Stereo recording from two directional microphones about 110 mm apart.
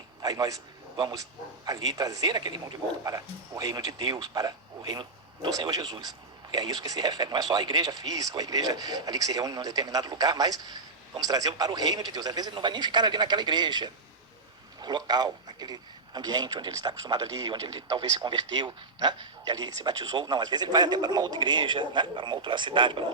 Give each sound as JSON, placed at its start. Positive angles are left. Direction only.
{"t": 0.2, "sound": "a man's voice", "side_deg": -35}
{"t": 3.0, "sound": "speech", "side_deg": -30}